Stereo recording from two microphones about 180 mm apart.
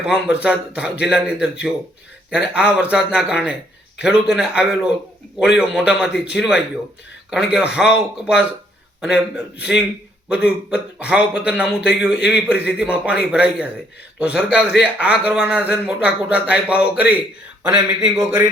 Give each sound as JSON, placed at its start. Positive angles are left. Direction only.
{"t": 0.0, "sound": "a man's voice", "side_deg": -5}
{"t": 10.2, "sound": "a man's voice", "side_deg": -5}